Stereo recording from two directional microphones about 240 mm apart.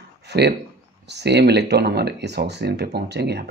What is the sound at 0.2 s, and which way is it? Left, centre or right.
Speech, right.